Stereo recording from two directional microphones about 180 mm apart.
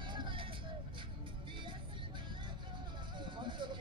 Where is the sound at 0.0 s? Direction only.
25° right (ahead or behind).